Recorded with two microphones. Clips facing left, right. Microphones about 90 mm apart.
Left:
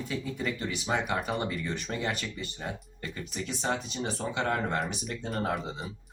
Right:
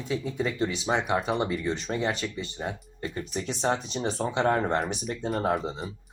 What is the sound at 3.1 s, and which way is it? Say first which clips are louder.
Speech: right 3 dB; 35° right (ahead or behind).